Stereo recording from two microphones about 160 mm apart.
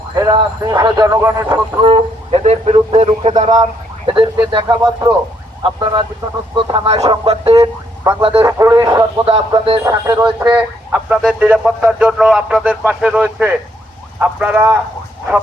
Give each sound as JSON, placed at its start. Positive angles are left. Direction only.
{"t": 0.2, "sound": "speech", "side_deg": -25}
{"t": 1.8, "sound": "speech", "side_deg": -35}
{"t": 8.1, "sound": "speech", "side_deg": -20}
{"t": 9.2, "sound": "speech", "side_deg": -35}
{"t": 9.8, "sound": "speech", "side_deg": -15}
{"t": 10.2, "sound": "speech", "side_deg": -25}
{"t": 10.9, "sound": "speech", "side_deg": -5}